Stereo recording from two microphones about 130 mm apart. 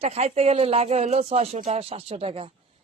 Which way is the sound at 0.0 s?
50° right (ahead or behind).